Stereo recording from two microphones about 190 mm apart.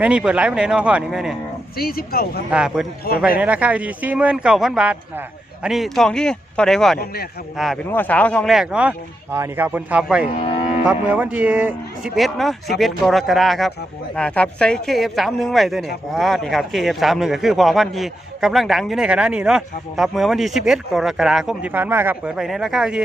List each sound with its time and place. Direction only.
0.0 s a man's voice: 5° right (ahead or behind)
1.7 s speech: 50° left (ahead or behind)
2.5 s a man's voice: 5° right (ahead or behind)
7.0 s a man's voice: 55° left (ahead or behind)
7.5 s a man's voice: centre (ahead or behind)